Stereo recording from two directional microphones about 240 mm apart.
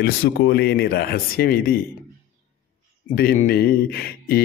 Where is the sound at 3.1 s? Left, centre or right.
Left.